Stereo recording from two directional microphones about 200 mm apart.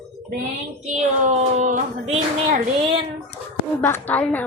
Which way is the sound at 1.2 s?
35° right (ahead or behind).